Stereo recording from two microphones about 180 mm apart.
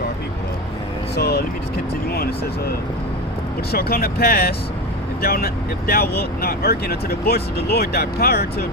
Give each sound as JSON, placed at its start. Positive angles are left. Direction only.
{"t": 1.1, "sound": "vehicle", "side_deg": 60}
{"t": 2.1, "sound": "speech", "side_deg": 60}